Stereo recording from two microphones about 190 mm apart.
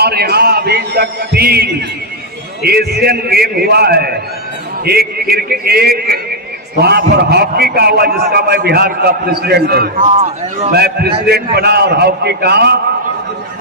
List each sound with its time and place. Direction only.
0.0 s a man's voice: 55° right (ahead or behind)
10.0 s a man's voice: 35° right (ahead or behind)
10.7 s a man's voice: 55° right (ahead or behind)